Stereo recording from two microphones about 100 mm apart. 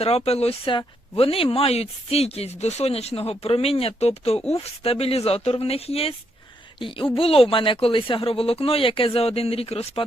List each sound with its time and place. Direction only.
0.3 s speech: 90° left
6.7 s speech: 60° left (ahead or behind); by 10.0 s 80° left